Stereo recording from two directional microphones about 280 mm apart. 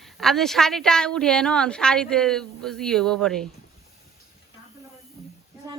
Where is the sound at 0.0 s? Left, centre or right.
Centre.